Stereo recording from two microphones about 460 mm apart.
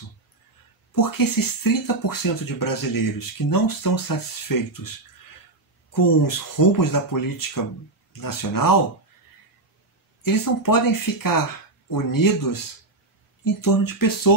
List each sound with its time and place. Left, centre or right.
0.9 s speech: left
5.9 s speech: left
10.2 s speech: left